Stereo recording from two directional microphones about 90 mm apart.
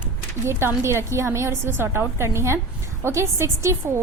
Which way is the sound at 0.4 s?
30° right (ahead or behind).